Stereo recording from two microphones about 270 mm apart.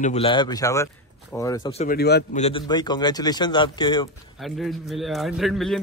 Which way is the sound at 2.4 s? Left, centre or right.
Centre.